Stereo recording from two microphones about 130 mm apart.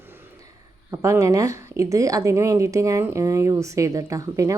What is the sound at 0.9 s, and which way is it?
Speech, 20° right (ahead or behind).